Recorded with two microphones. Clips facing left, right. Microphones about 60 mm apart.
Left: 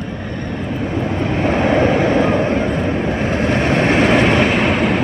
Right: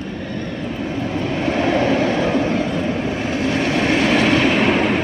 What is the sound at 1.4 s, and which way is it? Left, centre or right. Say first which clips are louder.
Vehicle: left 3 dB; left.